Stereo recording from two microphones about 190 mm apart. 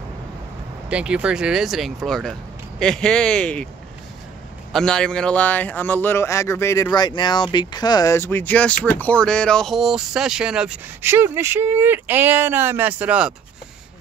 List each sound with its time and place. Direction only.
0.8 s speech: 5° right (ahead or behind)
4.7 s a man's voice: 5° left (ahead or behind)